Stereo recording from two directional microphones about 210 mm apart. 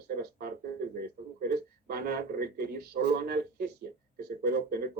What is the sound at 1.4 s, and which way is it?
Speech, 45° right (ahead or behind).